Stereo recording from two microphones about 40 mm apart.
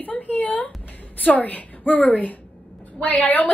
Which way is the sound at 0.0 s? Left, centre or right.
Left.